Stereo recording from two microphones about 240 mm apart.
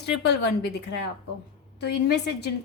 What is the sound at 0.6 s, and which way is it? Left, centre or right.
Speech, left.